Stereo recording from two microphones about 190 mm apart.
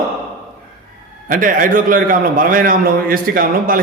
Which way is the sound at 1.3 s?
45° right (ahead or behind).